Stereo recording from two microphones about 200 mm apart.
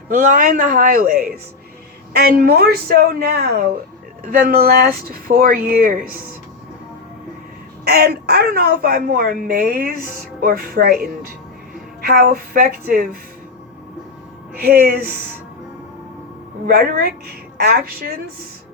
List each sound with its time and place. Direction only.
0.1 s a woman's voice: 40° right (ahead or behind)
7.9 s a woman's voice: 50° right (ahead or behind)
14.6 s a woman's voice: 50° right (ahead or behind)
16.6 s a woman's voice: 50° right (ahead or behind)